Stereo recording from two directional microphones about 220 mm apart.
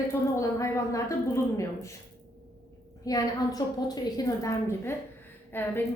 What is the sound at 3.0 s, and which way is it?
A woman's voice, 15° left (ahead or behind).